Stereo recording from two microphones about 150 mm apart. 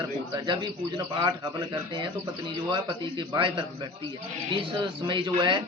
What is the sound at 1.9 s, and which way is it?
A man's voice, 30° right (ahead or behind).